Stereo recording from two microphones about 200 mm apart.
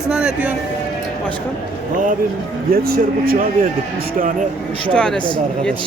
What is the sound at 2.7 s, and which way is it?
Speech, 50° right (ahead or behind).